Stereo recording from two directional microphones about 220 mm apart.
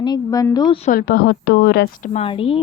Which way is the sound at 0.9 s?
45° left (ahead or behind).